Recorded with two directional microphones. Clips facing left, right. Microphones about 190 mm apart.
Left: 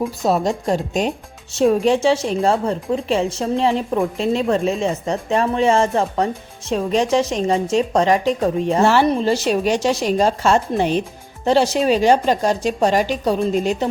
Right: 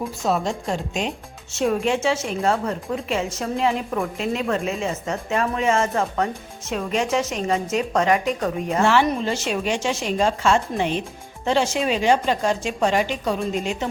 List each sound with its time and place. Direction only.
0.2 s a woman's voice: 35° left (ahead or behind)